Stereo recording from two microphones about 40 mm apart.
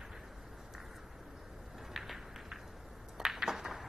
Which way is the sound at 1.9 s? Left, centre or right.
Centre.